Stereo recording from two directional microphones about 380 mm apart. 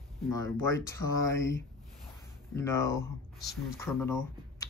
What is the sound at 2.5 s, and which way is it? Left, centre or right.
Speech, centre.